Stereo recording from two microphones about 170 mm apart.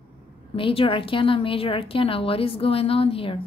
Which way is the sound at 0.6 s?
30° left (ahead or behind).